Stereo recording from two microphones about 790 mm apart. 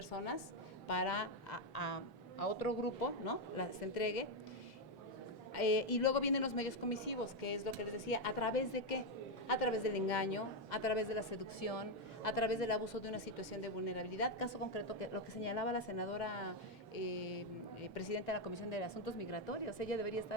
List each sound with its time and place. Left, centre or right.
0.9 s a woman's voice: left
5.5 s a woman's voice: left
17.9 s a woman's voice: left